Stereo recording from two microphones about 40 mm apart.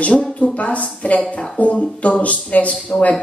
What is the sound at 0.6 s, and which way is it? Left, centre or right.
A woman's voice, left.